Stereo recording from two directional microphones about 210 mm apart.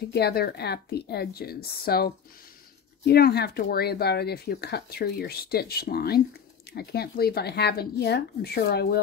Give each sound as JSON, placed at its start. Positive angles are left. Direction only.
{"t": 0.1, "sound": "speech", "side_deg": 50}